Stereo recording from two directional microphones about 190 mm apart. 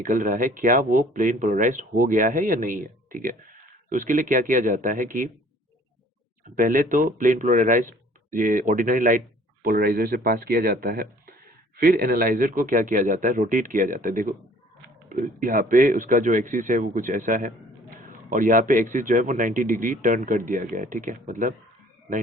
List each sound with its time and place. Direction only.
0.0 s speech: 45° right (ahead or behind)
6.6 s speech: 45° right (ahead or behind)